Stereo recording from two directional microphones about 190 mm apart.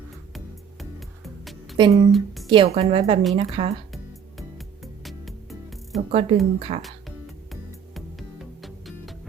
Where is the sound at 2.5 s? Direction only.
30° right (ahead or behind).